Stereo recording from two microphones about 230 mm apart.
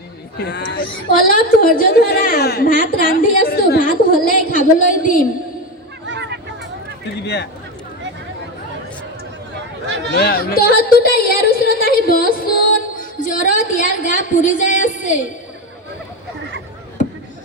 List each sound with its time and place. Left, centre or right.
0.3 s a woman's voice: left
6.1 s a sound: right
10.2 s a woman's voice: left